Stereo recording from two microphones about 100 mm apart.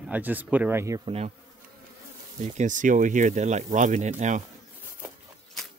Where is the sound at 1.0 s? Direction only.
90° right.